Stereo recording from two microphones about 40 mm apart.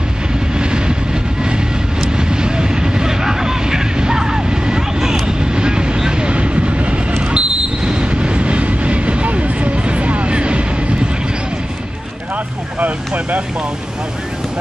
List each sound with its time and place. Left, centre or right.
0.6 s vehicle: right
2.0 s vehicle: centre
7.2 s train: right
12.8 s vehicle: right